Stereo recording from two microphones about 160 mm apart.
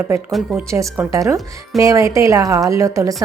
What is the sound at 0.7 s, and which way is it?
A woman's voice, 20° right (ahead or behind).